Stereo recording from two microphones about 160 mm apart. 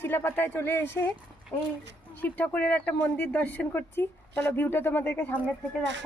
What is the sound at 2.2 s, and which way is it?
Speech, 10° left (ahead or behind).